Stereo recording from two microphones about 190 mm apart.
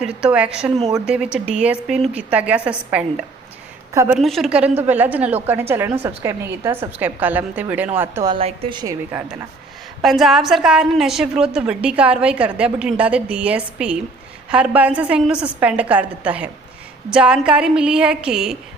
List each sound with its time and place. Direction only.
0.0 s a woman's voice: 5° right (ahead or behind)
4.2 s a woman's voice: centre (ahead or behind)
8.3 s a woman's voice: 30° right (ahead or behind)
10.0 s a woman's voice: centre (ahead or behind)